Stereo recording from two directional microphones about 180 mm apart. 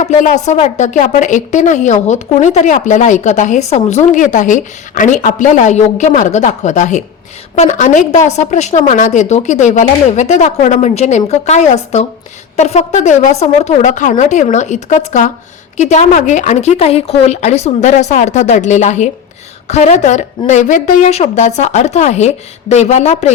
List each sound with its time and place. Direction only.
0.0 s a woman's voice: 40° left (ahead or behind)